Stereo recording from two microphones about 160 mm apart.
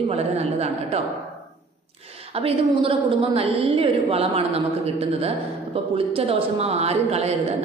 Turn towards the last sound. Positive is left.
turn(degrees=-40)  # may be behind; listen again after turning